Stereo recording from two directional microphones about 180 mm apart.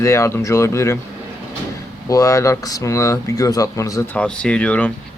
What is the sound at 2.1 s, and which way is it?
Speech, 20° left (ahead or behind).